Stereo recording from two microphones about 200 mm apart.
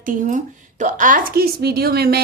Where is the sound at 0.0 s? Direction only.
40° right (ahead or behind).